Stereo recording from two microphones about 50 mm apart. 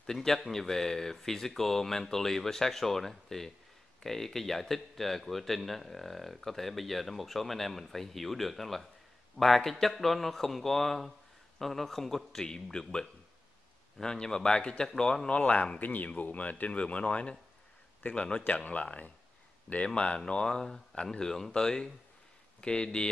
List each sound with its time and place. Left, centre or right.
0.0 s a man's voice: centre